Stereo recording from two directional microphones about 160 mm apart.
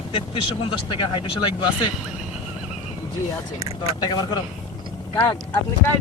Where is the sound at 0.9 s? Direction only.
30° left (ahead or behind).